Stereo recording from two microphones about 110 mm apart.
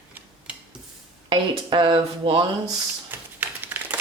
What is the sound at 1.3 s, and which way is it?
Speech, 50° right (ahead or behind).